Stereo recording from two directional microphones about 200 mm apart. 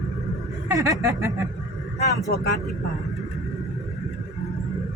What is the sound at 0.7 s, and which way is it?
Speech, 15° right (ahead or behind).